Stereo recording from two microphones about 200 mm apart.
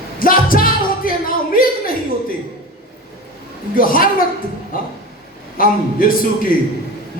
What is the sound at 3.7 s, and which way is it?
Speech, 45° left (ahead or behind).